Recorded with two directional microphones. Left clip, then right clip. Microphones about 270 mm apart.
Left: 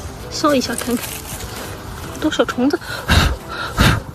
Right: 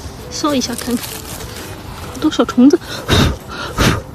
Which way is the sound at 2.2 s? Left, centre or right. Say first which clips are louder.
Right 4 dB; centre.